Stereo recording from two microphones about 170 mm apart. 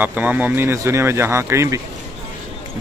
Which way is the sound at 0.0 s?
10° right (ahead or behind).